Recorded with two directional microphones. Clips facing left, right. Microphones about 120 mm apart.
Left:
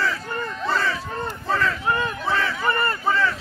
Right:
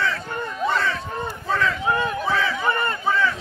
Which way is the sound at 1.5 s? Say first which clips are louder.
Right 1 dB; centre (ahead or behind).